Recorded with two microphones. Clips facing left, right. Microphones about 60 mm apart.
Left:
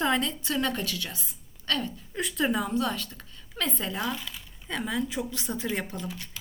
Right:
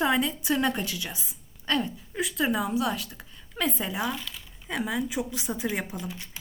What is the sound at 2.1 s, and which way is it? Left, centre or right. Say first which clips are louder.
A woman's voice: right 1 dB; centre.